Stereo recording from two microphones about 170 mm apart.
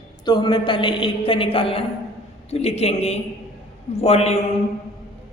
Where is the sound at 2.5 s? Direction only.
40° left (ahead or behind).